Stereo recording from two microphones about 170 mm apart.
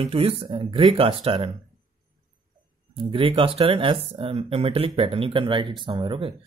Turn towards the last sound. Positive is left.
turn(degrees=-30)  # may be behind; listen again after turning